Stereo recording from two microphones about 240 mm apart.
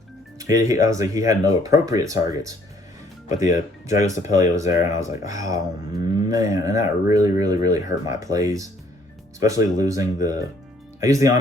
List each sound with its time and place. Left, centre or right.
0.3 s speech: centre
3.2 s speech: left
4.1 s speech: centre